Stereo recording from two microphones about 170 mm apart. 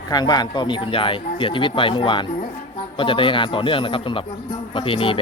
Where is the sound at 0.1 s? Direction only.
25° left (ahead or behind).